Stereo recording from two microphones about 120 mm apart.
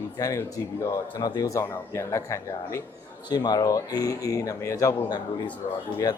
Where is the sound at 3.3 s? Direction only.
35° left (ahead or behind).